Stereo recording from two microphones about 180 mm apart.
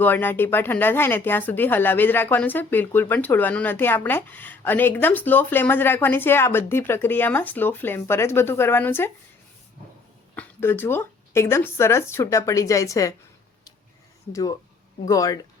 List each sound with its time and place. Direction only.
0.0 s speech: 10° left (ahead or behind)
10.3 s speech: 10° left (ahead or behind)
14.3 s speech: 20° left (ahead or behind)